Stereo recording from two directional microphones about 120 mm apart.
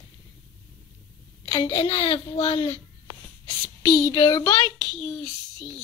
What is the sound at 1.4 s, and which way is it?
A child's voice, 50° left (ahead or behind).